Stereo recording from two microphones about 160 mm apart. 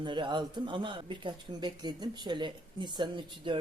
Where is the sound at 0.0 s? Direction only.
30° right (ahead or behind).